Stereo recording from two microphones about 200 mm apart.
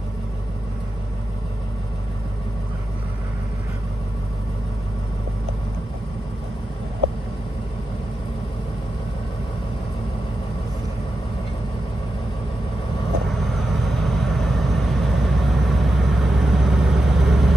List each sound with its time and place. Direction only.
13.8 s vehicle: centre (ahead or behind)